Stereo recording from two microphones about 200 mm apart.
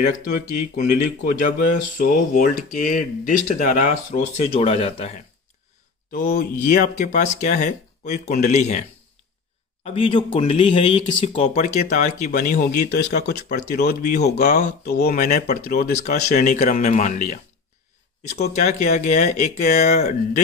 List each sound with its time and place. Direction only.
0.7 s speech: 40° left (ahead or behind)
6.1 s speech: 50° left (ahead or behind)
9.8 s speech: 25° left (ahead or behind); by 13.6 s 55° left (ahead or behind)
14.4 s speech: 40° left (ahead or behind)
18.5 s speech: 35° left (ahead or behind)